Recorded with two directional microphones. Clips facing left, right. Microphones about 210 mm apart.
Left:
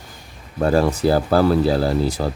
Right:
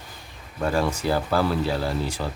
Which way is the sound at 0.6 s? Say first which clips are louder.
Left 7 dB; 40° left (ahead or behind).